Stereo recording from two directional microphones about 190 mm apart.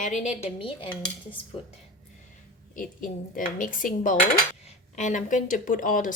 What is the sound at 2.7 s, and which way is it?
Speech, 45° left (ahead or behind).